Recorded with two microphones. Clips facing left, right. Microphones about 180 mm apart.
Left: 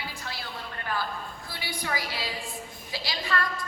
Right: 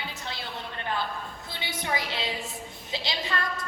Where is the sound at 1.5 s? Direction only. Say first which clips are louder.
Right 2 dB; 20° right (ahead or behind).